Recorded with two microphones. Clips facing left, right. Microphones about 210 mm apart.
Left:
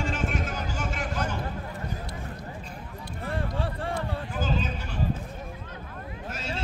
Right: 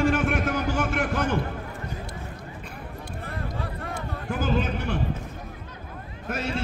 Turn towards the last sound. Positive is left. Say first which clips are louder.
# right 5 dB
turn(degrees=-60)  # may be behind; listen again after turning